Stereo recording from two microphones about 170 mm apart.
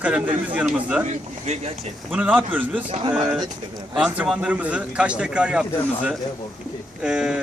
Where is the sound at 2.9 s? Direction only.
40° right (ahead or behind).